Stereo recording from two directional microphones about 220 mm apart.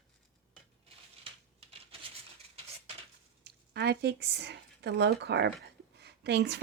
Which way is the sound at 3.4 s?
50° right (ahead or behind).